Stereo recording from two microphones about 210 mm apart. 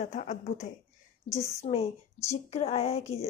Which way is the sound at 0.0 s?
35° left (ahead or behind).